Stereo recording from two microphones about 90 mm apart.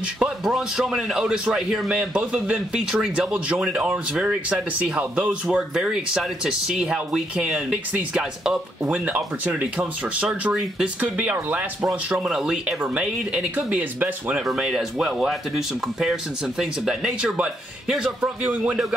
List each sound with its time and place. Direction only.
0.2 s a man's voice: 5° right (ahead or behind); by 11.6 s 20° right (ahead or behind)
11.8 s a man's voice: 10° right (ahead or behind)
14.3 s speech: 5° right (ahead or behind)